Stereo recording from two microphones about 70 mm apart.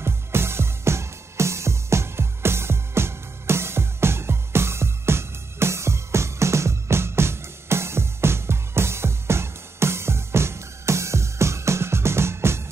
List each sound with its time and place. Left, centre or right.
0.0 s music: right